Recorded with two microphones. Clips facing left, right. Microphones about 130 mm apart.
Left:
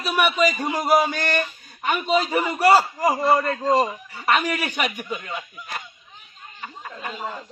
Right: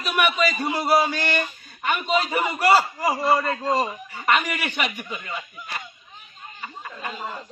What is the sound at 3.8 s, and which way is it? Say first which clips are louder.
Speech: left 2 dB; 10° left (ahead or behind).